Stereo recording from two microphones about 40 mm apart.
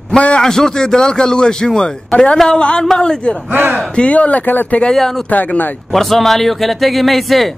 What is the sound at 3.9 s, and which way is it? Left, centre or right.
Speech, left.